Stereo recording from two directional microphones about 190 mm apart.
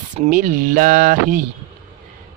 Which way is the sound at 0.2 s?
45° right (ahead or behind).